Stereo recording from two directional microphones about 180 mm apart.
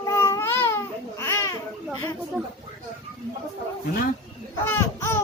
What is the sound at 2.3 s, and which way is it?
Speech, 5° right (ahead or behind).